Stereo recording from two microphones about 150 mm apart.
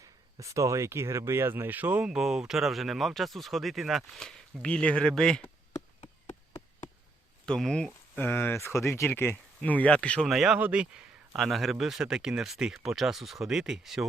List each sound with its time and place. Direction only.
0.3 s speech: 20° right (ahead or behind); by 5.5 s 5° left (ahead or behind)
5.7 s a sound: 45° left (ahead or behind)
7.4 s speech: 5° left (ahead or behind)